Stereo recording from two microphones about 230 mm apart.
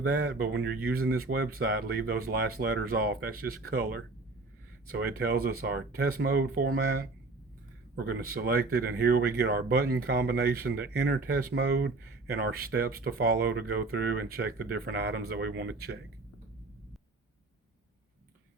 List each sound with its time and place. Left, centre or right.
0.3 s speech: right